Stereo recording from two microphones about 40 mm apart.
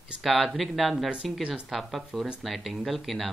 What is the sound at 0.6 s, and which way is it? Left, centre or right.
Speech, centre.